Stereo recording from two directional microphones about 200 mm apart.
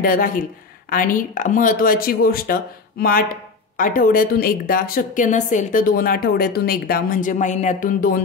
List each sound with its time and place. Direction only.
0.0 s a woman's voice: 45° left (ahead or behind)